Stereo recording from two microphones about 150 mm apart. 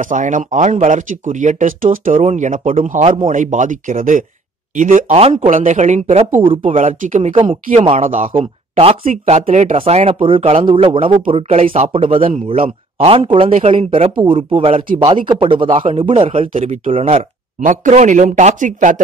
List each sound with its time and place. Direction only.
0.0 s speech: 60° right (ahead or behind)
8.4 s speech: 40° right (ahead or behind)
9.1 s speech: 50° right (ahead or behind)
11.6 s speech: 55° right (ahead or behind)
11.9 s speech: 35° right (ahead or behind)
16.5 s speech: 55° right (ahead or behind)